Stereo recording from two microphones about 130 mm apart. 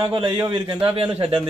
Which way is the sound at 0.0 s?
40° right (ahead or behind).